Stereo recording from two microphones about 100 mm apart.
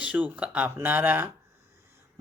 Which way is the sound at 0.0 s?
15° right (ahead or behind).